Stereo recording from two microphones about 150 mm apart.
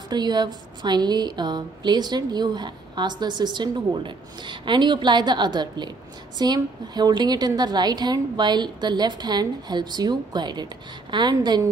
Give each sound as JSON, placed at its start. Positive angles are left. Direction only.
{"t": 0.1, "sound": "speech", "side_deg": -30}